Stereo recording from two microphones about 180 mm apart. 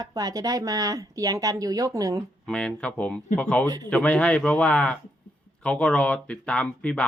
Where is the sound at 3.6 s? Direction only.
20° right (ahead or behind).